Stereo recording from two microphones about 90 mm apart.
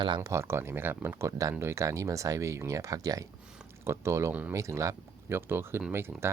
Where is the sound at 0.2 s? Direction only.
35° right (ahead or behind).